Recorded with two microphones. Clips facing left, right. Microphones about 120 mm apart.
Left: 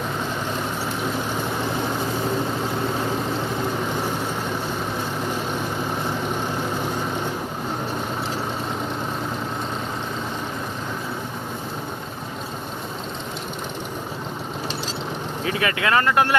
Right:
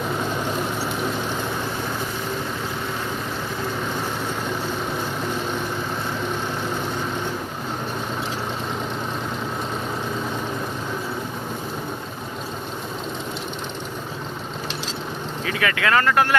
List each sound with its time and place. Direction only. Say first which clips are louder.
15.4 s speech: even; 25° left (ahead or behind)